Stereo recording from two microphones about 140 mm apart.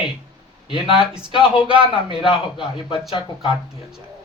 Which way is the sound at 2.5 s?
40° left (ahead or behind).